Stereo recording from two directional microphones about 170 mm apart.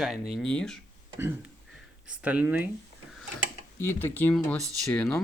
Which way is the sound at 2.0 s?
10° right (ahead or behind).